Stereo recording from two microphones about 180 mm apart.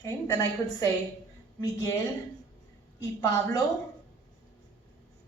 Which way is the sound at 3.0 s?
20° left (ahead or behind).